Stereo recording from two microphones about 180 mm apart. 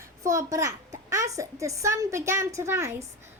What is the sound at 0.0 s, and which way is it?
Speech, 15° right (ahead or behind).